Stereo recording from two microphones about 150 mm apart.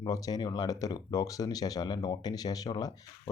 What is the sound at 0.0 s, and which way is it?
Speech, 25° left (ahead or behind).